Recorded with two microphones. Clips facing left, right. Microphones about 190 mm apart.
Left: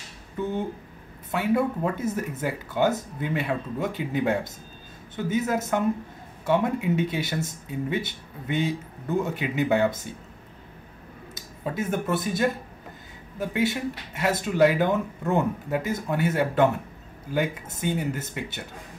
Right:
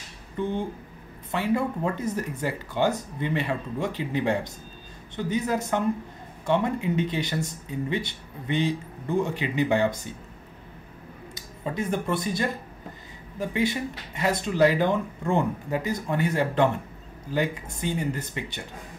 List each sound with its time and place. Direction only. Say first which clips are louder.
0.4 s a sound: even; 5° left (ahead or behind)
1.3 s speech: left 2 dB; 5° left (ahead or behind)
11.3 s speech: even; 5° left (ahead or behind)